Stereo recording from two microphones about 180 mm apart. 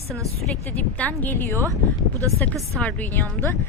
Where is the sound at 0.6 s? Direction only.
10° left (ahead or behind).